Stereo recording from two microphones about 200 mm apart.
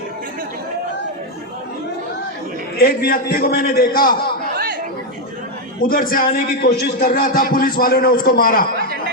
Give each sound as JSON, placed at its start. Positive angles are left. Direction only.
{"t": 2.7, "sound": "a man's voice", "side_deg": 50}
{"t": 5.8, "sound": "a man's voice", "side_deg": 45}